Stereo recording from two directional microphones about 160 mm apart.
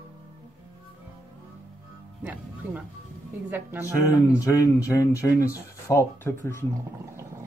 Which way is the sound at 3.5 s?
10° right (ahead or behind).